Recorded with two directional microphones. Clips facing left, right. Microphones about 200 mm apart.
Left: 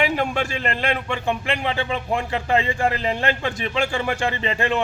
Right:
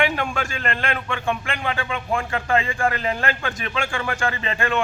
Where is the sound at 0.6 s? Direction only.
25° left (ahead or behind).